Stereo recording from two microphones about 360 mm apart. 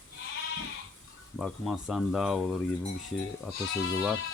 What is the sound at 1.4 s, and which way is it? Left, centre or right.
Speech, centre.